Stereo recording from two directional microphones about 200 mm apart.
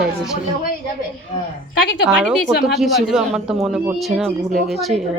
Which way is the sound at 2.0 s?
Centre (ahead or behind).